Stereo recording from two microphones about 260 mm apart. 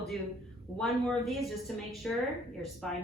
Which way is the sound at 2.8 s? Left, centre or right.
Centre.